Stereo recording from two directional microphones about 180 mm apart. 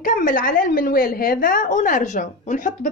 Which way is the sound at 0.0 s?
50° left (ahead or behind).